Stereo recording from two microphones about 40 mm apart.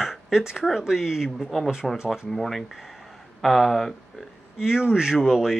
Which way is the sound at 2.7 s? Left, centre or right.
Centre.